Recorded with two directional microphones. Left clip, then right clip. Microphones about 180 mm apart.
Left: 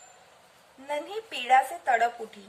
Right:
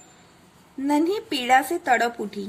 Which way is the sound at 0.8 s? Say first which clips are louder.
Right 10 dB; 40° right (ahead or behind).